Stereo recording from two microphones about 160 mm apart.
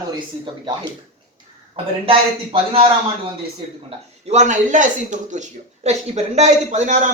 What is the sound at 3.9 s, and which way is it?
A man's voice, 45° right (ahead or behind).